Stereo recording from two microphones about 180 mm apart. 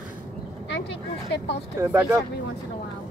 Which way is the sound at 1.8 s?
10° right (ahead or behind).